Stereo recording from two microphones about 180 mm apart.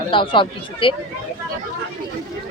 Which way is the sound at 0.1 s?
30° left (ahead or behind).